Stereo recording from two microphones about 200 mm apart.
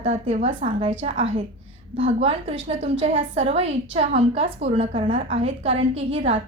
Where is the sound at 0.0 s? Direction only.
35° right (ahead or behind).